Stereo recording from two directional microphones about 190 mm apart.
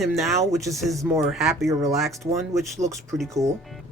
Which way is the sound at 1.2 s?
Centre (ahead or behind).